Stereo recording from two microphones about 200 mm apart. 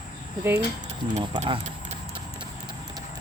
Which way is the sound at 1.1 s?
30° right (ahead or behind).